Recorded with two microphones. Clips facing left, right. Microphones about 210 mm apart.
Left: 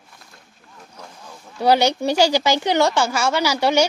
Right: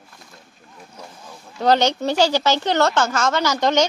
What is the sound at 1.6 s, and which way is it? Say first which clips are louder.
Speech: left 1 dB; 10° left (ahead or behind).